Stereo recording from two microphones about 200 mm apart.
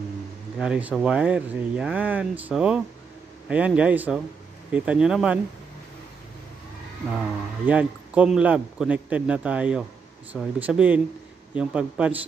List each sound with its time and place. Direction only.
0.6 s a man's voice: 5° right (ahead or behind)
7.6 s a man's voice: 5° right (ahead or behind)